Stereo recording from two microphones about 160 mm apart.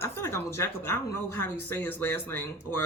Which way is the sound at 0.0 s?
15° left (ahead or behind).